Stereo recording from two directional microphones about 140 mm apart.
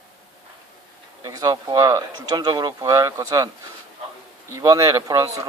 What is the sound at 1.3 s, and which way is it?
Speech, 30° right (ahead or behind).